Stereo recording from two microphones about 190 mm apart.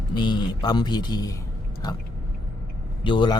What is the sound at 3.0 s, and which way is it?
Speech, 25° left (ahead or behind).